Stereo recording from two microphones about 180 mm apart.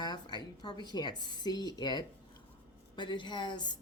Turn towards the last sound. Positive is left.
turn(degrees=25)  # may be behind; listen again after turning